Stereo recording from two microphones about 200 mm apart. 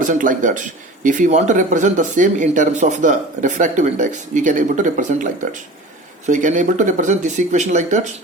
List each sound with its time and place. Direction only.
0.0 s speech: 40° right (ahead or behind)